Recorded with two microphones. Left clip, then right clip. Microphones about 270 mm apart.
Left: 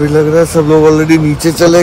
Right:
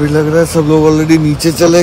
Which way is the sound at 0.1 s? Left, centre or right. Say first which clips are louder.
Left 3 dB; centre.